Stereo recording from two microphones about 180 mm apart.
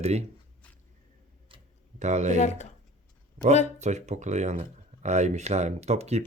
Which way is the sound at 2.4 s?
40° left (ahead or behind).